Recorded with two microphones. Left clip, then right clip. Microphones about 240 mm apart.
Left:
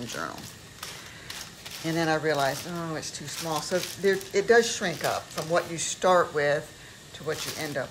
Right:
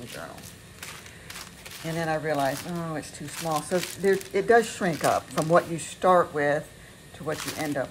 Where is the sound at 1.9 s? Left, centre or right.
Centre.